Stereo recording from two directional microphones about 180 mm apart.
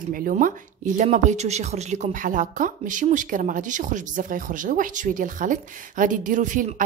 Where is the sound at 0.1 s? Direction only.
50° right (ahead or behind).